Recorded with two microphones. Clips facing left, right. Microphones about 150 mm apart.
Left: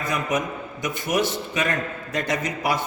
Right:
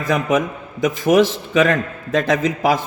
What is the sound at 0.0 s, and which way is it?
A man's voice, 90° right.